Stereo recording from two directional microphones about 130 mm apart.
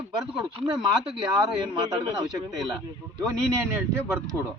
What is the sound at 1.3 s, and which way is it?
Speech, 35° right (ahead or behind).